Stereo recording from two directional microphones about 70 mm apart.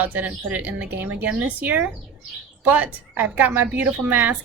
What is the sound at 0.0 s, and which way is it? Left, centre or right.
A woman's voice, right.